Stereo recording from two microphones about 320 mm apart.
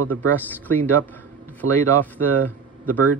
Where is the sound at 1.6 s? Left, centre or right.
Right.